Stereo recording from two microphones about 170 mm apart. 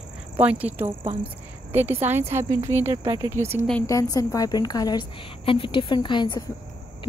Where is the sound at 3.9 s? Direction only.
20° left (ahead or behind).